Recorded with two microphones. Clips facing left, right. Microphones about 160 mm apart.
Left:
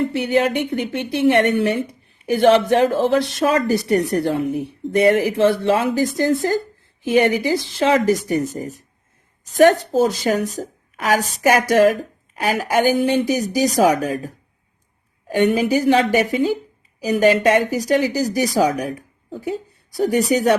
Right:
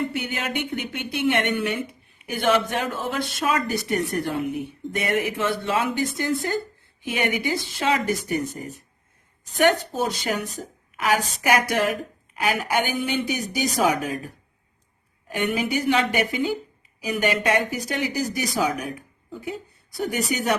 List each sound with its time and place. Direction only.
0.0 s speech: 35° left (ahead or behind)
9.9 s speech: 40° left (ahead or behind)
15.4 s speech: 35° left (ahead or behind)